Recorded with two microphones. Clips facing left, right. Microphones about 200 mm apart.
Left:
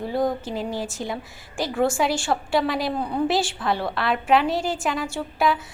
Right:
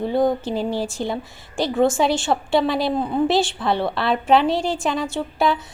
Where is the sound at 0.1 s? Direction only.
25° right (ahead or behind).